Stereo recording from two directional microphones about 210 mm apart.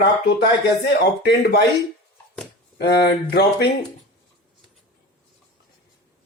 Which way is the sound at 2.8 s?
50° left (ahead or behind).